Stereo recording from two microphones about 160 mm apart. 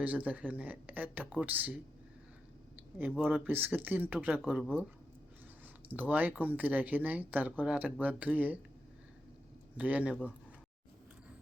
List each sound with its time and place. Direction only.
0.0 s speech: 10° right (ahead or behind)
3.2 s speech: 10° right (ahead or behind)
5.9 s speech: 10° right (ahead or behind)
9.7 s speech: 10° right (ahead or behind)